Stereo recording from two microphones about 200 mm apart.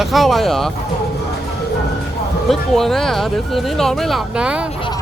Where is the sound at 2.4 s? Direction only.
Centre (ahead or behind).